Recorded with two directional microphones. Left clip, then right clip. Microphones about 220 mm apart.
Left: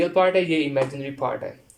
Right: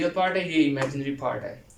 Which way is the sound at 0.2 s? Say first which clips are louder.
Left 5 dB; 50° left (ahead or behind).